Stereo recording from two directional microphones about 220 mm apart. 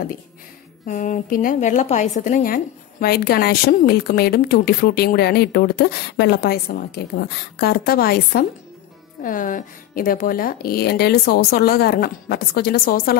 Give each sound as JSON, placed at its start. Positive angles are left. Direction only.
{"t": 0.8, "sound": "a woman's voice", "side_deg": 35}